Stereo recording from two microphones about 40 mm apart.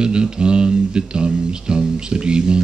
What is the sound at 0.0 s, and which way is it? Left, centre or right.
Speech, right.